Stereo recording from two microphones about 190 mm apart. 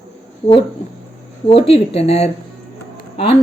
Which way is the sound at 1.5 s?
30° left (ahead or behind).